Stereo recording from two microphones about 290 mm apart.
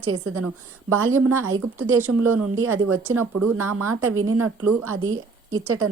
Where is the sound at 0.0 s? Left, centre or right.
Right.